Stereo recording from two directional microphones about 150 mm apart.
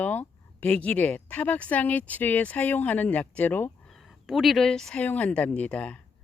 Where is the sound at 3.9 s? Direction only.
Centre (ahead or behind).